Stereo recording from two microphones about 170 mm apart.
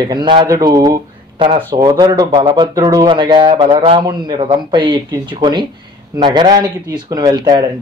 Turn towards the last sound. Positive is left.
turn(degrees=-25)  # may be behind; listen again after turning